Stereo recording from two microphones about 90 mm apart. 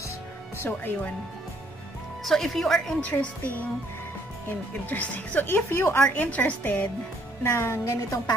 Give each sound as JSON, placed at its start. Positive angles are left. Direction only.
{"t": 0.6, "sound": "a woman's voice", "side_deg": 20}
{"t": 2.2, "sound": "speech", "side_deg": 5}
{"t": 3.0, "sound": "a woman's voice", "side_deg": 15}
{"t": 4.8, "sound": "a woman's voice", "side_deg": 20}
{"t": 6.0, "sound": "a woman's voice", "side_deg": 15}
{"t": 7.4, "sound": "a woman's voice", "side_deg": 30}